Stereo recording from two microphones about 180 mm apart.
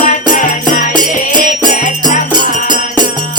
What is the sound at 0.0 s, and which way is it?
Music, 45° left (ahead or behind).